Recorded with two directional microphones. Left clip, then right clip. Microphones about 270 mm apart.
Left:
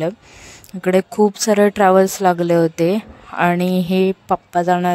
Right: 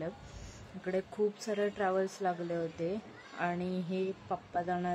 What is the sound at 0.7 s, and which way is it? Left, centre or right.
Speech, left.